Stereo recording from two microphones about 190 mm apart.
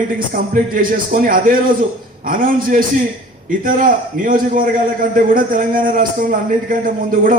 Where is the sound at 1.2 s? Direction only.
50° right (ahead or behind).